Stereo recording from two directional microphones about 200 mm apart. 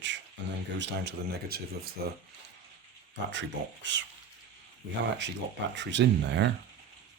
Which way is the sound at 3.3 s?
65° right (ahead or behind).